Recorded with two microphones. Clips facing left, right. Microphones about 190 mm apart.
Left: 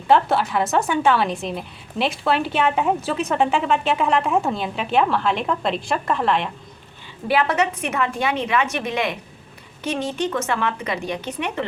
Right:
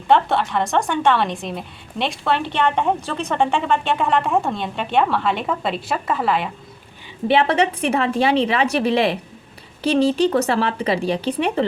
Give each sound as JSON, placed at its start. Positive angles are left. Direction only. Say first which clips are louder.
{"t": 0.1, "sound": "a woman's voice", "louder": "even", "side_deg": 0}
{"t": 7.3, "sound": "a woman's voice", "louder": "right 3 dB", "side_deg": -30}